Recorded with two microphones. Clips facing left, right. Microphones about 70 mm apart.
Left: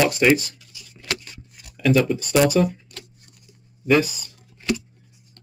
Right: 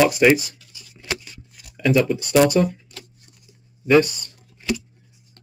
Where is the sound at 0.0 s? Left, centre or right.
Centre.